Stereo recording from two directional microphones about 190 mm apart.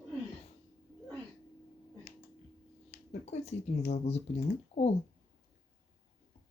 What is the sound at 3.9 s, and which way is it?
Speech, 35° left (ahead or behind).